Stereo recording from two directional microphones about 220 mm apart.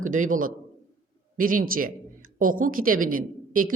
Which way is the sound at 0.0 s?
35° right (ahead or behind).